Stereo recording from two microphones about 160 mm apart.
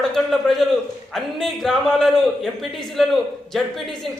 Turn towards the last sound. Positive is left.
turn(degrees=0)  # may be behind; listen again after turning